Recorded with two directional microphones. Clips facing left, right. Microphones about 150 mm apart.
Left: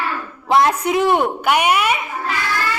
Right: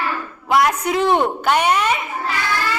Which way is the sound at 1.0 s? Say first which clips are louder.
Right 1 dB; 10° left (ahead or behind).